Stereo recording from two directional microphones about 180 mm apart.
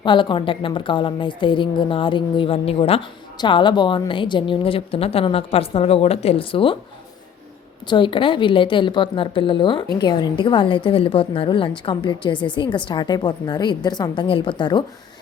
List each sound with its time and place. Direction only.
0.0 s speech: 25° left (ahead or behind)
7.9 s speech: 25° left (ahead or behind)